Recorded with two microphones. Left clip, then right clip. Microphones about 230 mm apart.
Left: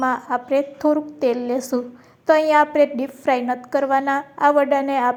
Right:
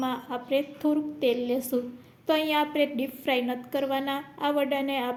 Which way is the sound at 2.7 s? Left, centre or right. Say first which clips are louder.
Left 9 dB; left.